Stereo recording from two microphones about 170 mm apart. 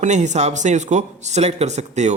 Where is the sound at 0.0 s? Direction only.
45° right (ahead or behind).